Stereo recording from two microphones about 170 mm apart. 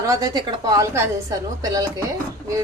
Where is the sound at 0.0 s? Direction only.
20° right (ahead or behind).